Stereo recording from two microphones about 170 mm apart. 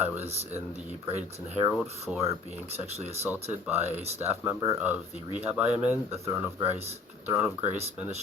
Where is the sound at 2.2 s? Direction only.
35° right (ahead or behind).